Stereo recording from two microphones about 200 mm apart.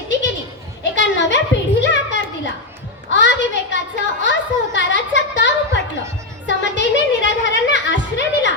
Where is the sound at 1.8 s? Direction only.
65° left (ahead or behind).